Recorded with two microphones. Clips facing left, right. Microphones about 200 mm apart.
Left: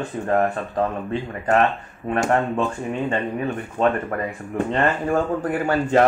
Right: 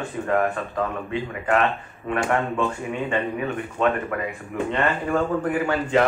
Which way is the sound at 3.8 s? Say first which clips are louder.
Left 2 dB; 40° left (ahead or behind).